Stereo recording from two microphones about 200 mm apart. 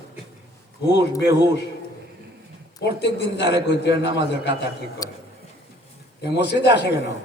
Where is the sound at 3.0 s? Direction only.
60° left (ahead or behind).